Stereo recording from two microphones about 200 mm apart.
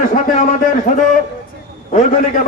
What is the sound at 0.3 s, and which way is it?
A man's voice, 40° left (ahead or behind).